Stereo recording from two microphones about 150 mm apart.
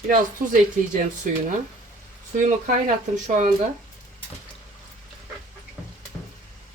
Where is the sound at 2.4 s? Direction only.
60° right (ahead or behind).